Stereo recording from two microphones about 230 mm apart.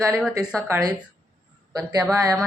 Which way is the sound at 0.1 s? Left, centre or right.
Centre.